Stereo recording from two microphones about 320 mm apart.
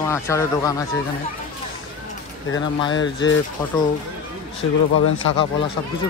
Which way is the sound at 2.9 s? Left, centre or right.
Left.